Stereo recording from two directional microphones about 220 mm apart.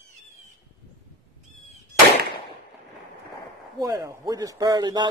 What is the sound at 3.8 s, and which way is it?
A man's voice, 15° right (ahead or behind).